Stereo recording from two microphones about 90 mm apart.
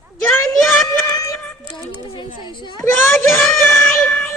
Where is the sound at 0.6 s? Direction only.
Centre (ahead or behind).